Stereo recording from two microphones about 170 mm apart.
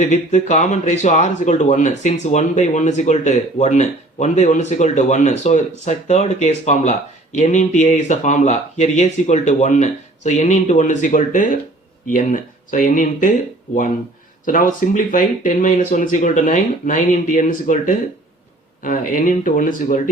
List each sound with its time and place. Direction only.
0.0 s speech: 45° left (ahead or behind)
14.4 s speech: 50° left (ahead or behind)